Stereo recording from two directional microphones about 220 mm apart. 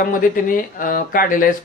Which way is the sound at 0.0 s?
40° left (ahead or behind).